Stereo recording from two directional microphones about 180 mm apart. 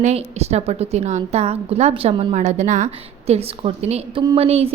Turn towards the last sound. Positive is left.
turn(degrees=-35)  # may be behind; listen again after turning